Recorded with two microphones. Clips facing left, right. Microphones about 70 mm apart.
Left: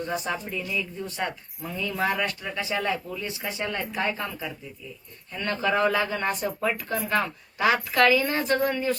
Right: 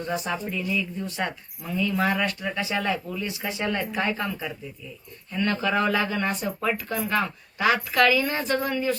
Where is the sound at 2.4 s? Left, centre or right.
Right.